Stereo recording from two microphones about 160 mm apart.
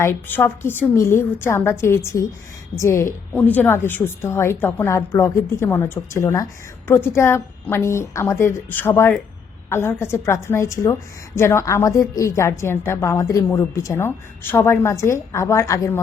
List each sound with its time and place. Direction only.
0.0 s a woman's voice: 15° left (ahead or behind)